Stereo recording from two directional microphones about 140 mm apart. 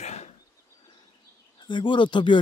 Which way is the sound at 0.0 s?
50° left (ahead or behind).